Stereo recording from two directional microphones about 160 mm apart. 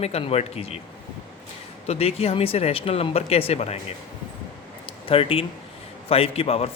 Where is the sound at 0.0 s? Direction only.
40° left (ahead or behind).